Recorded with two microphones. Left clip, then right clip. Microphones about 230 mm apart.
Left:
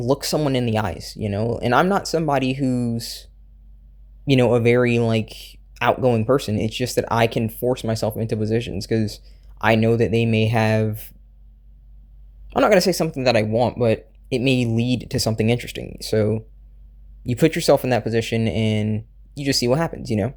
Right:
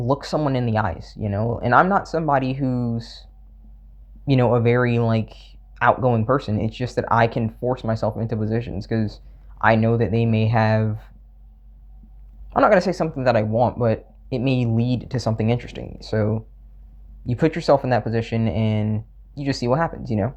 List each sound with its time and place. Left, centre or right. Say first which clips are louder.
0.0 s speech: left 1 dB; left
4.3 s speech: left 2 dB; left
12.5 s speech: even; left